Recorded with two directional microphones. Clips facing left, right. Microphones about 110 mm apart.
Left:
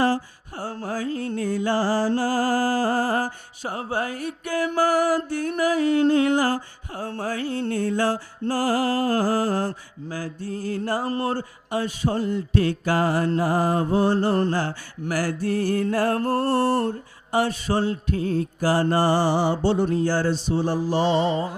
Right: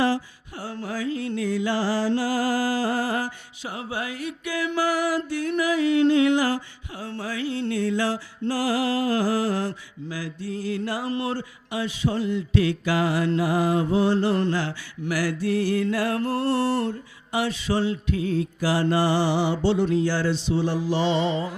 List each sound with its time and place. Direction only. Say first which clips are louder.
0.0 s music: left 1 dB; 45° left (ahead or behind)